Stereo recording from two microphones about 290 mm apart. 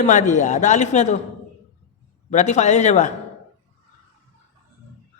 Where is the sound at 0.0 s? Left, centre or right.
Left.